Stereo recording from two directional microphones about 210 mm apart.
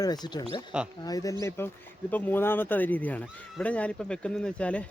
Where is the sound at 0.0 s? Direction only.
20° left (ahead or behind).